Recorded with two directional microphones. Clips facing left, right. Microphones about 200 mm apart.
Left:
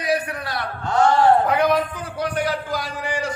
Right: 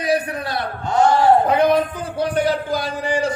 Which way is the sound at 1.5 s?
25° right (ahead or behind).